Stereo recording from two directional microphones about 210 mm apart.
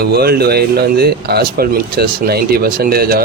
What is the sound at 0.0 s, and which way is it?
Speech, 50° right (ahead or behind).